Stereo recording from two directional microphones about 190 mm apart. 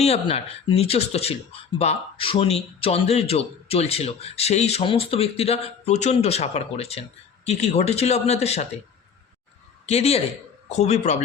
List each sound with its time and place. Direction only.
0.0 s a man's voice: 30° left (ahead or behind)
9.8 s a man's voice: 35° left (ahead or behind)